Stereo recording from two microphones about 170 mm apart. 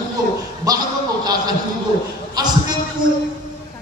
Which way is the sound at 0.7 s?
20° right (ahead or behind).